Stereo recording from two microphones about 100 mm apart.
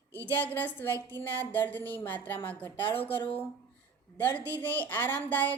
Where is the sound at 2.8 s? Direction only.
70° left (ahead or behind).